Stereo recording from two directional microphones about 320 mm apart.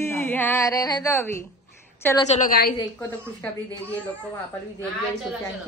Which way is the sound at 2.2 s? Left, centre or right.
Left.